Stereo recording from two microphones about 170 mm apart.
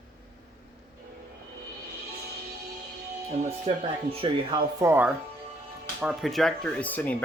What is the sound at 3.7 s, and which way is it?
Speech, 40° right (ahead or behind).